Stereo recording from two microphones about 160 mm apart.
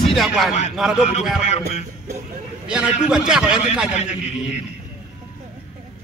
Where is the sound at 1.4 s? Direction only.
45° left (ahead or behind).